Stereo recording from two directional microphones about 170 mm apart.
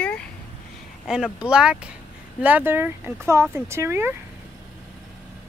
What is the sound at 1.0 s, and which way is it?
Speech, 5° right (ahead or behind).